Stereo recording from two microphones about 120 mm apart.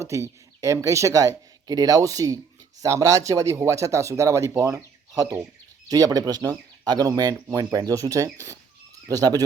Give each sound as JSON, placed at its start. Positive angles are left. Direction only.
{"t": 0.0, "sound": "speech", "side_deg": -25}